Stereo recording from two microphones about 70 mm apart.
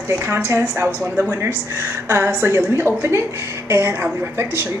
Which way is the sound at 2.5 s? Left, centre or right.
Right.